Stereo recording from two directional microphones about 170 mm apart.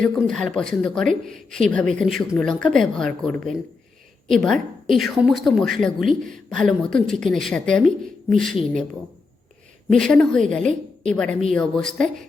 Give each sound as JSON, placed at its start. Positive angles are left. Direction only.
{"t": 0.0, "sound": "a woman's voice", "side_deg": 5}
{"t": 9.9, "sound": "a woman's voice", "side_deg": 5}
{"t": 10.6, "sound": "a woman's voice", "side_deg": -45}
{"t": 11.1, "sound": "a woman's voice", "side_deg": 5}